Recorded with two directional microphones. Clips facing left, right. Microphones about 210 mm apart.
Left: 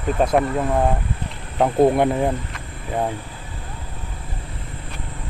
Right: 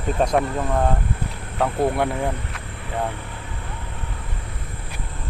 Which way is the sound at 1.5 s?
20° left (ahead or behind).